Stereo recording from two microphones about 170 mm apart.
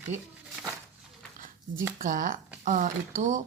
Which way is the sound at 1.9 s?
50° right (ahead or behind).